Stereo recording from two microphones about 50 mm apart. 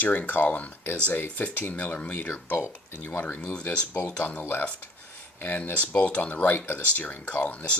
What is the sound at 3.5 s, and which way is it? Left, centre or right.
Speech, left.